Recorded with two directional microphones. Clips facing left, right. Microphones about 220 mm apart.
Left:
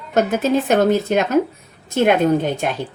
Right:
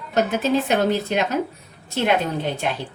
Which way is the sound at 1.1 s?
45° left (ahead or behind).